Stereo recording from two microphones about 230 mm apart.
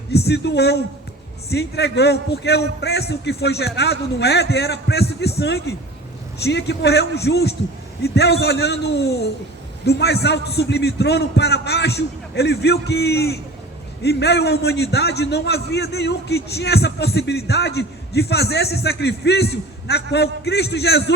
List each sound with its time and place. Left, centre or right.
0.3 s a man's voice: left